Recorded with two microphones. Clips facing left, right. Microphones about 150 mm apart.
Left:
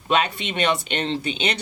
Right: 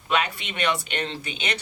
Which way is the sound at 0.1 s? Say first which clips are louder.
Left 4 dB; 25° left (ahead or behind).